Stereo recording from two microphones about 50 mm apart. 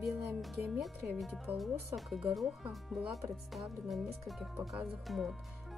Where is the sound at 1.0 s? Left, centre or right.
Right.